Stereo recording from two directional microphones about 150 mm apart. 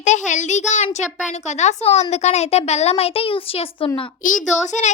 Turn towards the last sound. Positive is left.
turn(degrees=55)  # may be behind; listen again after turning